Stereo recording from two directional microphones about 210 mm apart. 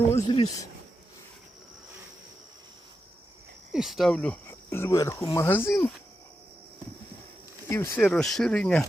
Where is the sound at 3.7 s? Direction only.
Centre (ahead or behind).